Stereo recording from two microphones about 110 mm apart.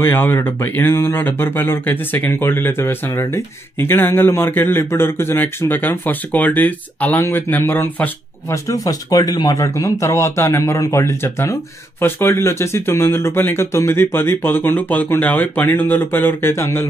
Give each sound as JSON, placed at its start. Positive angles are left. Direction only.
{"t": 0.0, "sound": "speech", "side_deg": 20}